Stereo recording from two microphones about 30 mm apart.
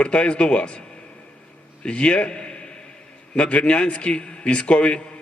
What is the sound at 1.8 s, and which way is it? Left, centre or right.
A man's voice, left.